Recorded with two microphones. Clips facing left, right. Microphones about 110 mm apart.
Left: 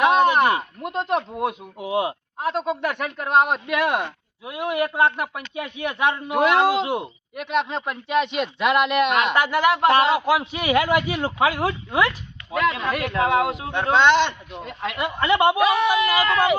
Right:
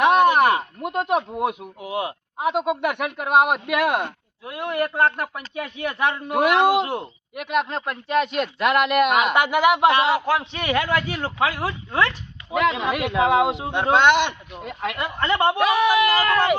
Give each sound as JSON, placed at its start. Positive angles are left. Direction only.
{"t": 0.0, "sound": "a sound", "side_deg": -10}
{"t": 0.8, "sound": "speech", "side_deg": -5}
{"t": 1.8, "sound": "speech", "side_deg": 20}
{"t": 2.4, "sound": "speech", "side_deg": -15}
{"t": 4.4, "sound": "a man's voice", "side_deg": 10}
{"t": 6.8, "sound": "a man's voice", "side_deg": 10}
{"t": 7.3, "sound": "speech", "side_deg": -5}
{"t": 10.1, "sound": "a man's voice", "side_deg": 15}
{"t": 12.7, "sound": "speech", "side_deg": -10}
{"t": 14.9, "sound": "speech", "side_deg": 10}